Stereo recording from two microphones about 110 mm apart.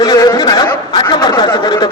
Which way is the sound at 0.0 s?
35° left (ahead or behind).